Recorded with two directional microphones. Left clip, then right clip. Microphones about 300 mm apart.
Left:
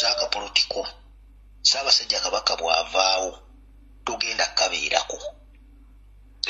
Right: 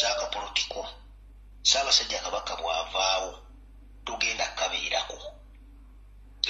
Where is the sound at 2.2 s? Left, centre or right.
Left.